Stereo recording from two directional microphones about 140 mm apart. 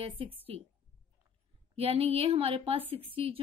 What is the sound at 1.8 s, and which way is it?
Speech, 45° right (ahead or behind).